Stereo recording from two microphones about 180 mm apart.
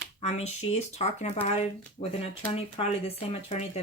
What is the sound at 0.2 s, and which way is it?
Speech, 35° left (ahead or behind).